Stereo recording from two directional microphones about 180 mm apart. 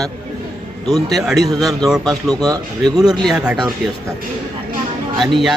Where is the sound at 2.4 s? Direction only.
20° right (ahead or behind).